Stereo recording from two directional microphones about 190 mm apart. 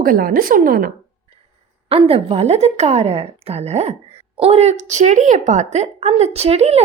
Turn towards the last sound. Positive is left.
turn(degrees=-35)  # may be behind; listen again after turning